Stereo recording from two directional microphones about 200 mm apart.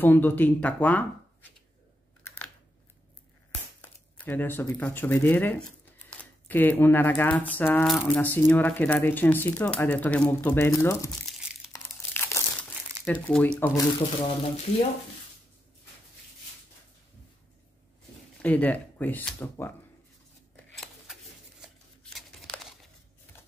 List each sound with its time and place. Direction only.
0.0 s speech: 10° left (ahead or behind)
3.8 s speech: 10° left (ahead or behind)
11.2 s crumpling: centre (ahead or behind)
11.7 s crumpling: 15° left (ahead or behind)
13.0 s speech: 10° left (ahead or behind)
18.4 s speech: 10° left (ahead or behind)
20.7 s a sound: centre (ahead or behind)
22.1 s crumpling: centre (ahead or behind)